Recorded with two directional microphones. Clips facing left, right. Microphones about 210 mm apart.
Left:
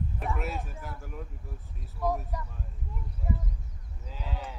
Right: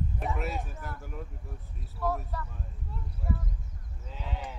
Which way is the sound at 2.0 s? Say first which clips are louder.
Left 1 dB; 15° left (ahead or behind).